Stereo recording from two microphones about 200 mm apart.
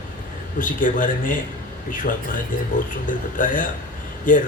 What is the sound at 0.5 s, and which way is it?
Speech, 40° left (ahead or behind).